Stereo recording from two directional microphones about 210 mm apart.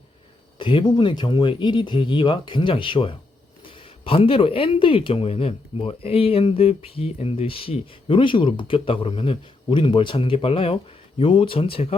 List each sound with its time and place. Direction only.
0.6 s speech: 25° left (ahead or behind)